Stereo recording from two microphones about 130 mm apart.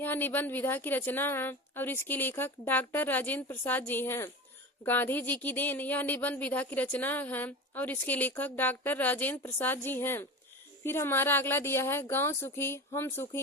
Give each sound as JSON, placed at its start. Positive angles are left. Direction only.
{"t": 0.0, "sound": "speech", "side_deg": 15}